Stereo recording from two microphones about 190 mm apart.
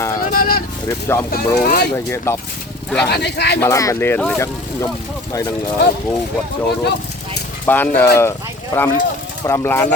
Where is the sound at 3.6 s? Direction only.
15° left (ahead or behind).